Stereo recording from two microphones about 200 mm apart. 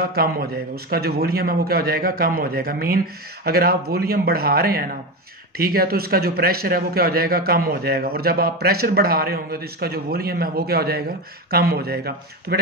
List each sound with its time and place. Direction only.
0.1 s a man's voice: 50° right (ahead or behind)